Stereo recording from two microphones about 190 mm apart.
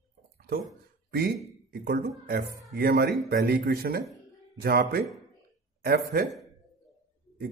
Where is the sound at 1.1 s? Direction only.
55° right (ahead or behind).